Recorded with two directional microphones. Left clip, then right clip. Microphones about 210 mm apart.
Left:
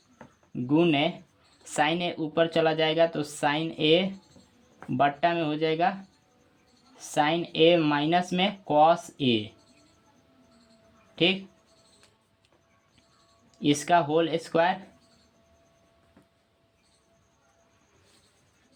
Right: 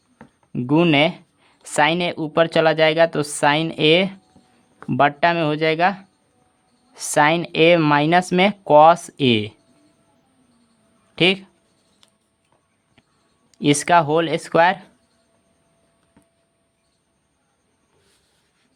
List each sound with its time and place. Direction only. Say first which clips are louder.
0.5 s speech: right 7 dB; 35° right (ahead or behind)
6.9 s speech: right 9 dB; 30° right (ahead or behind)
11.1 s speech: right 7 dB; 35° right (ahead or behind)
13.5 s speech: right 7 dB; 35° right (ahead or behind)